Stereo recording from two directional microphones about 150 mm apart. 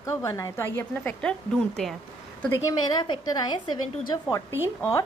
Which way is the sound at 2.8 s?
30° left (ahead or behind).